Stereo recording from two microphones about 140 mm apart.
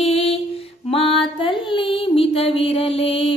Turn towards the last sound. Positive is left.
turn(degrees=40)  # may be behind; listen again after turning